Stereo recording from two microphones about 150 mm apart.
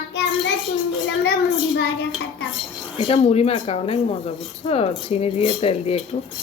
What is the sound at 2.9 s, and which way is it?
Speech, 40° left (ahead or behind).